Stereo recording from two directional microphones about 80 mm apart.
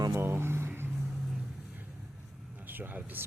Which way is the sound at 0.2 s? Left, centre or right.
Right.